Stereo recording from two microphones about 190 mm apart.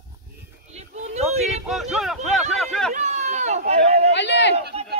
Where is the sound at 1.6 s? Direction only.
Centre (ahead or behind).